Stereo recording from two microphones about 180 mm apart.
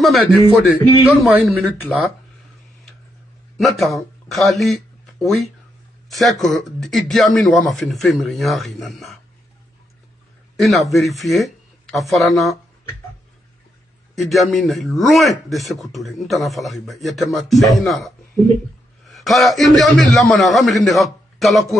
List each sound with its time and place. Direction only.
0.0 s a man's voice: centre (ahead or behind)
3.5 s a man's voice: centre (ahead or behind)
10.5 s speech: centre (ahead or behind)
14.1 s a man's voice: centre (ahead or behind)